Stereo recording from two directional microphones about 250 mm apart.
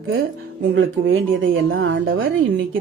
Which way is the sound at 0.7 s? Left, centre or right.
Right.